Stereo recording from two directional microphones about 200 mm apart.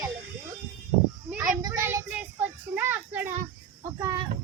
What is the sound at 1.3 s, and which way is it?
A child's voice, 5° right (ahead or behind).